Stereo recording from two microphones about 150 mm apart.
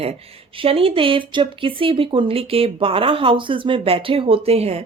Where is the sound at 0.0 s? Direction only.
40° right (ahead or behind).